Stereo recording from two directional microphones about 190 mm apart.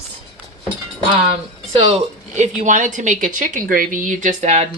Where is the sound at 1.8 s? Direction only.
35° right (ahead or behind).